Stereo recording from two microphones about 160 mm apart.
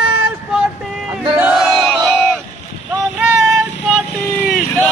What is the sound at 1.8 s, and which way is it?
Crowd, centre (ahead or behind).